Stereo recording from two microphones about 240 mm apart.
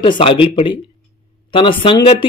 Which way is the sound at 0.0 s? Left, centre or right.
Left.